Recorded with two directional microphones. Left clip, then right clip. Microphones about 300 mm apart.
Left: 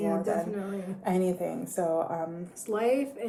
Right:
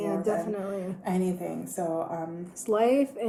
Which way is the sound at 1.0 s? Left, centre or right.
Left.